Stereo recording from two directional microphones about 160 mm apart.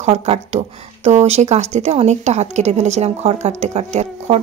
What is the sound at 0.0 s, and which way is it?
Speech, 40° right (ahead or behind).